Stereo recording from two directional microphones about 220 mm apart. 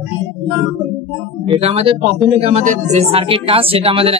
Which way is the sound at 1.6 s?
25° right (ahead or behind).